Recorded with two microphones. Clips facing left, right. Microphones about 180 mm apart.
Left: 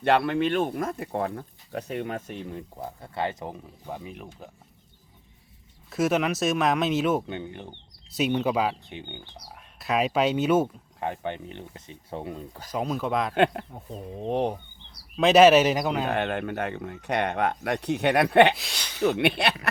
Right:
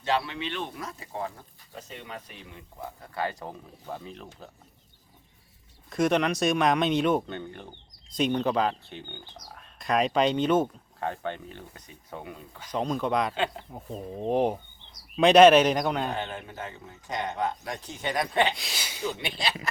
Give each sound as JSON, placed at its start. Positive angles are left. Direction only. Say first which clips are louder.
{"t": 0.0, "sound": "speech", "louder": "left 7 dB", "side_deg": 55}
{"t": 5.9, "sound": "speech", "louder": "even", "side_deg": 5}
{"t": 7.3, "sound": "speech", "louder": "left 2 dB", "side_deg": 15}
{"t": 9.7, "sound": "speech", "louder": "even", "side_deg": 5}
{"t": 12.7, "sound": "speech", "louder": "even", "side_deg": 5}
{"t": 13.3, "sound": "speech", "louder": "left 7 dB", "side_deg": 60}
{"t": 13.7, "sound": "speech", "louder": "right 1 dB", "side_deg": -5}
{"t": 16.0, "sound": "speech", "louder": "left 6 dB", "side_deg": 65}
{"t": 18.5, "sound": "a sound", "louder": "even", "side_deg": 0}
{"t": 18.9, "sound": "speech", "louder": "left 10 dB", "side_deg": 65}